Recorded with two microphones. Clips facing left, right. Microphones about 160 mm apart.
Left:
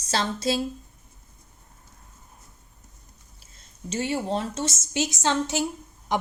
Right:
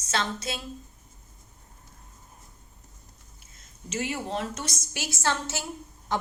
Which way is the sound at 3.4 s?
30° left (ahead or behind).